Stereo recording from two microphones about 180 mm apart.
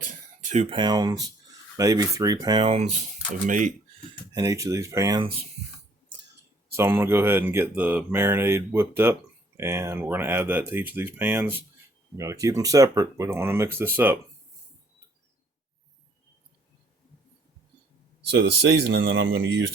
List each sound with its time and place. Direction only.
0.0 s speech: 40° right (ahead or behind)
4.4 s speech: 15° right (ahead or behind)
6.7 s speech: 15° right (ahead or behind)
18.3 s speech: 65° right (ahead or behind)